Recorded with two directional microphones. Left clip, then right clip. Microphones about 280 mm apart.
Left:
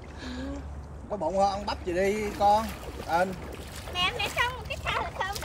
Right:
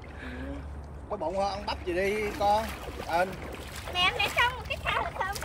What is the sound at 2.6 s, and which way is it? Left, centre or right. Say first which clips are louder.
A child's voice: left 1 dB; centre.